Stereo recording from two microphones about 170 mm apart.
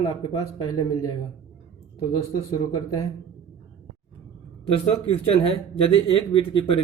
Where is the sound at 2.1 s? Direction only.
25° left (ahead or behind).